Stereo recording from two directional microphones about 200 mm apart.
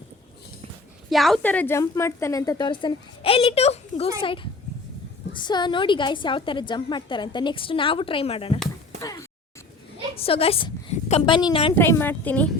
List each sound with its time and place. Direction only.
1.1 s a woman's voice: centre (ahead or behind); by 4.1 s 30° left (ahead or behind)
5.3 s a woman's voice: 20° left (ahead or behind)
9.0 s speech: 15° left (ahead or behind)
10.2 s a woman's voice: 30° left (ahead or behind)
11.7 s a woman's voice: 10° left (ahead or behind)